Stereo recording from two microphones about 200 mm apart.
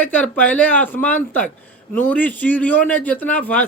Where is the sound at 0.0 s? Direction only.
10° left (ahead or behind).